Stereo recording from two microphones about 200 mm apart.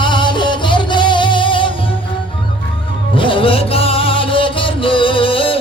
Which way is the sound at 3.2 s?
25° left (ahead or behind).